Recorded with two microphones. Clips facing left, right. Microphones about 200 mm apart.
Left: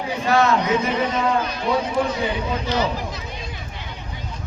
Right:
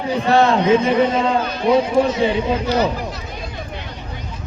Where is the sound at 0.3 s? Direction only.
30° right (ahead or behind).